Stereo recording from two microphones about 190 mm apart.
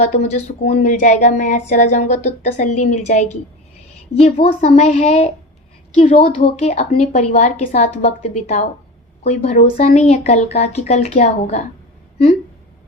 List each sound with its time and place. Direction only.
0.0 s speech: 35° left (ahead or behind)